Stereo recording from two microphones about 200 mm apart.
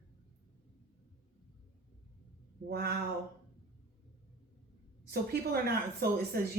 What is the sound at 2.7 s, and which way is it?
Speech, 50° right (ahead or behind).